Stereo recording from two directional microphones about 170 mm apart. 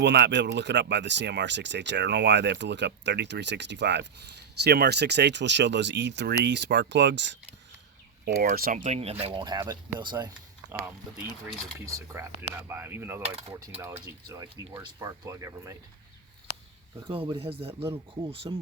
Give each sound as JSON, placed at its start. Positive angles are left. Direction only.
{"t": 0.0, "sound": "speech", "side_deg": -90}
{"t": 8.4, "sound": "speech", "side_deg": -60}
{"t": 11.9, "sound": "speech", "side_deg": -15}
{"t": 17.0, "sound": "speech", "side_deg": -30}